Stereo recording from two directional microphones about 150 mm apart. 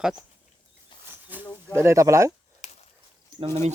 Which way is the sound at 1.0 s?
15° right (ahead or behind).